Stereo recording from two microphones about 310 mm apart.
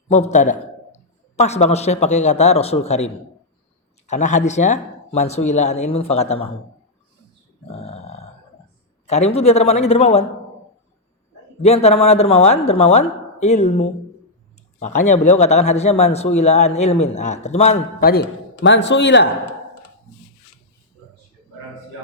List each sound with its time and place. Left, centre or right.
0.1 s a man's voice: left
7.7 s grunt: centre
9.0 s a man's voice: left
11.6 s a man's voice: left